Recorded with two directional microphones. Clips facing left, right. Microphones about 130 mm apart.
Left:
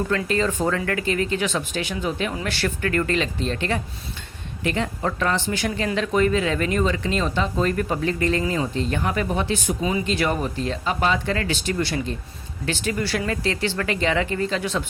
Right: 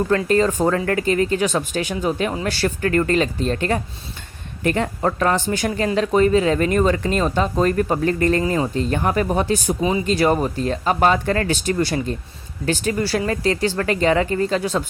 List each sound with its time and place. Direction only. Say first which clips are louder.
0.1 s speech: right 5 dB; 40° right (ahead or behind)